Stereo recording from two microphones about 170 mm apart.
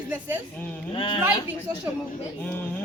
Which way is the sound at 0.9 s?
30° left (ahead or behind).